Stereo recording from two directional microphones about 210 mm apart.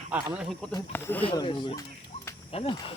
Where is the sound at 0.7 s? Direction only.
10° left (ahead or behind).